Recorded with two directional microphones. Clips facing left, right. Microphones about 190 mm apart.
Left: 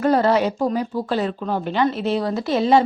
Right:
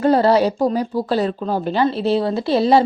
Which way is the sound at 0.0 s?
30° right (ahead or behind).